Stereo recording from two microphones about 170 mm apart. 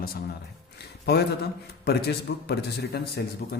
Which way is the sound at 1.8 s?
75° left (ahead or behind).